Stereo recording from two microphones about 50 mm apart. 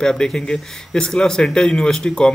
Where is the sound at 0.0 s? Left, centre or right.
Centre.